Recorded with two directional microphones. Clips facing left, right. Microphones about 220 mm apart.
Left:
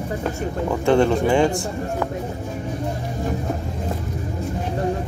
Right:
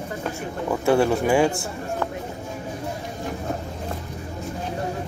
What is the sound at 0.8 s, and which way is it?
Speech, 5° right (ahead or behind).